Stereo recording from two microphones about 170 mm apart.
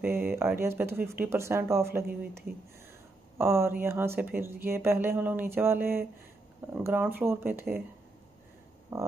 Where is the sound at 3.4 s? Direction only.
15° right (ahead or behind).